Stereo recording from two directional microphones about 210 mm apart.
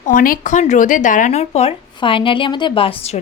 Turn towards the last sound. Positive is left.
turn(degrees=30)  # may be behind; listen again after turning